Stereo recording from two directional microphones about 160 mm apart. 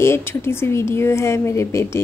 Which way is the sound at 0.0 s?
15° left (ahead or behind).